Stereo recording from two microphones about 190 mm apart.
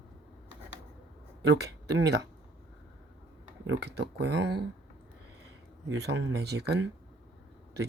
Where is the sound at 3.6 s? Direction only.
60° right (ahead or behind).